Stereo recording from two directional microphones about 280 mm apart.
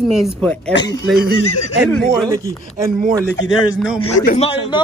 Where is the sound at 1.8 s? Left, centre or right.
Centre.